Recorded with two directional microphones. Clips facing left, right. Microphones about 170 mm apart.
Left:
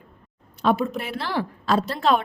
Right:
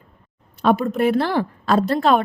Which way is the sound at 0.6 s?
50° right (ahead or behind).